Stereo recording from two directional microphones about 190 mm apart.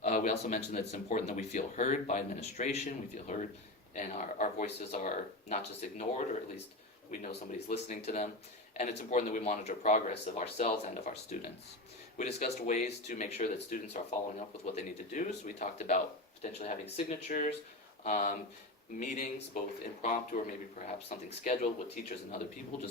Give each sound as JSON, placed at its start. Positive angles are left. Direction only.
{"t": 0.0, "sound": "speech", "side_deg": 40}
{"t": 7.7, "sound": "speech", "side_deg": 40}